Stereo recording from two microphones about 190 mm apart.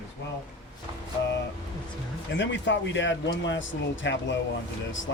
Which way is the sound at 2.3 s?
70° left (ahead or behind).